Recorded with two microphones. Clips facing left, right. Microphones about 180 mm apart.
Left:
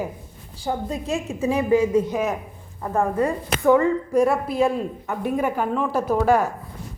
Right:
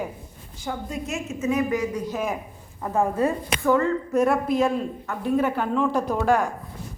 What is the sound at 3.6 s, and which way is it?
Speech, 15° left (ahead or behind).